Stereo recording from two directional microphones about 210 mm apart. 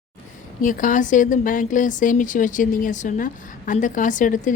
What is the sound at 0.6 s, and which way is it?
Speech, 40° left (ahead or behind).